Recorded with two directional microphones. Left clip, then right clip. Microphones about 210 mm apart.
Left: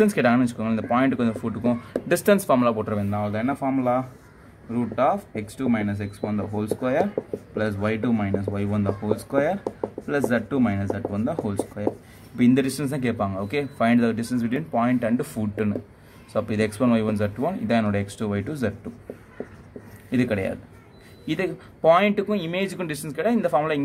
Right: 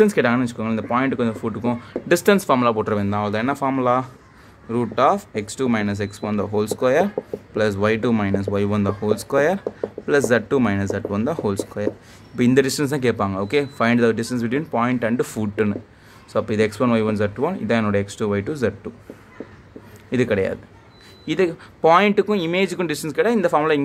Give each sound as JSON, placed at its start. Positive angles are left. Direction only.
{"t": 0.0, "sound": "speech", "side_deg": -10}
{"t": 2.9, "sound": "a man's voice", "side_deg": -30}
{"t": 20.1, "sound": "a man's voice", "side_deg": -20}